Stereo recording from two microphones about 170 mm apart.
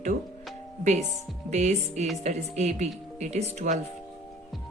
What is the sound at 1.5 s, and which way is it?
Speech, 40° right (ahead or behind).